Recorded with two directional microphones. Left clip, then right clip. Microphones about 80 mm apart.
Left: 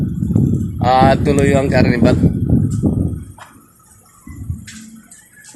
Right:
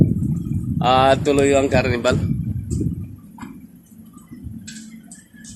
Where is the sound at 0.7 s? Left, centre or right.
Centre.